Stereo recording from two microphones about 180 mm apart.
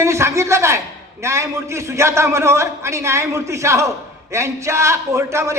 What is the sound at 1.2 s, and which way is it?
A man's voice, 15° right (ahead or behind).